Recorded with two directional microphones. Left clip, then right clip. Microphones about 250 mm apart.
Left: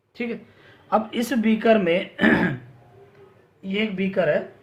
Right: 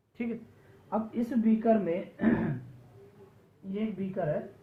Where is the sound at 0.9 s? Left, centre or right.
Left.